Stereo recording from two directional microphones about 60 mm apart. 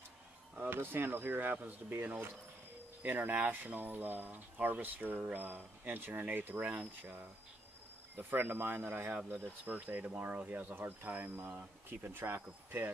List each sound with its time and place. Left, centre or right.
0.6 s speech: right